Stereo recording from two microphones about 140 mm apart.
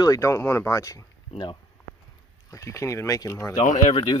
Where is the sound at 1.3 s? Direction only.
35° left (ahead or behind).